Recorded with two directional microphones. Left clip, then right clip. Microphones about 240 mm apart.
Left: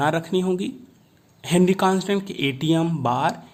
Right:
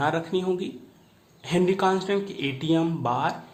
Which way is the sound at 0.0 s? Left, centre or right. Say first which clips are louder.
Left 3 dB; left.